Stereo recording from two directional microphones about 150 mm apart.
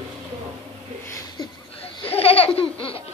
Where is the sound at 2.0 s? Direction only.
40° left (ahead or behind).